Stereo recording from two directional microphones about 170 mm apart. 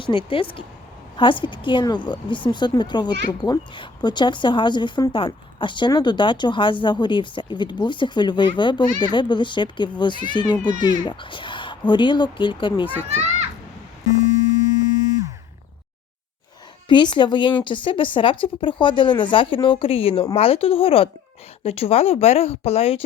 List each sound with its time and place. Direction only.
0.0 s speech: 30° left (ahead or behind)
13.1 s children playing: 40° right (ahead or behind)
16.9 s speech: 25° left (ahead or behind)